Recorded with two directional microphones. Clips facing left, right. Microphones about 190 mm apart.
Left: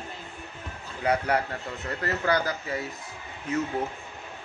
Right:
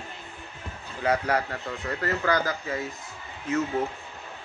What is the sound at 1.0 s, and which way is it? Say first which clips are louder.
Speech: even; 25° left (ahead or behind).